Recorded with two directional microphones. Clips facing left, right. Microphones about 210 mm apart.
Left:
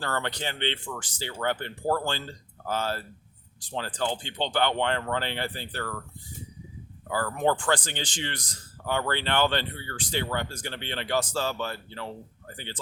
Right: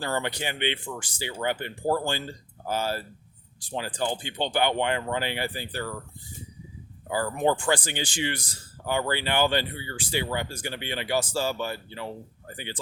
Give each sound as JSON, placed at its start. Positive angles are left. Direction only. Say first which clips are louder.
{"t": 0.0, "sound": "a man's voice", "louder": "right 2 dB", "side_deg": -10}
{"t": 7.1, "sound": "a man's voice", "louder": "right 1 dB", "side_deg": -15}